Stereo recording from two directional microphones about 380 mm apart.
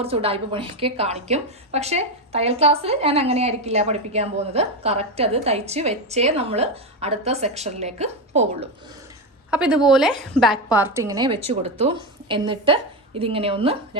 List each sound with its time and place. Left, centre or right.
0.0 s a woman's voice: centre
9.5 s a woman's voice: centre